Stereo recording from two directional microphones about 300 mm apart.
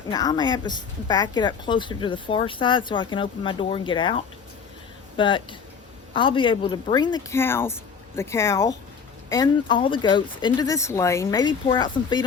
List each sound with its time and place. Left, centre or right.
0.1 s speech: centre